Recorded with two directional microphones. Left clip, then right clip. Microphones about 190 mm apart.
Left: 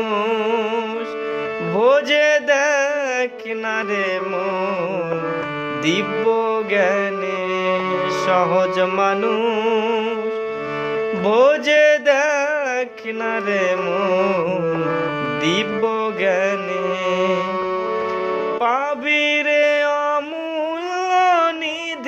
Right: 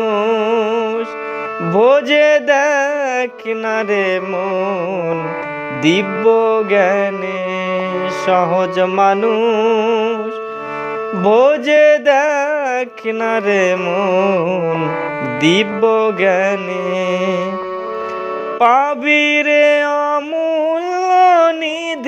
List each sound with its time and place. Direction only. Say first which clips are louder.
0.1 s music: right 3 dB; 30° right (ahead or behind)
5.9 s music: right 6 dB; 35° right (ahead or behind)
8.3 s music: right 3 dB; 30° right (ahead or behind)
11.2 s music: right 4 dB; 30° right (ahead or behind)
18.6 s music: right 11 dB; 40° right (ahead or behind)